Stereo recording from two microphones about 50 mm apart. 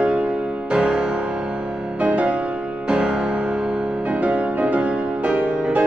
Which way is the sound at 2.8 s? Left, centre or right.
Centre.